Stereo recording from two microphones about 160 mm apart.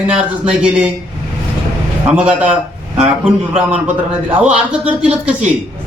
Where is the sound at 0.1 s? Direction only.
5° right (ahead or behind).